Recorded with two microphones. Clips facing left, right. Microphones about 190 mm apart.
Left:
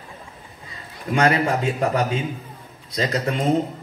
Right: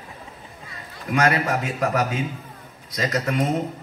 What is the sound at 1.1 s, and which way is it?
A man's voice, 30° left (ahead or behind).